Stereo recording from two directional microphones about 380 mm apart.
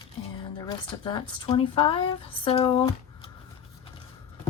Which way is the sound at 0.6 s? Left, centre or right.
Centre.